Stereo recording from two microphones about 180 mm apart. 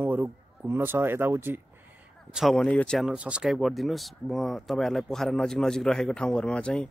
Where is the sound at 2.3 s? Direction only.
Centre (ahead or behind).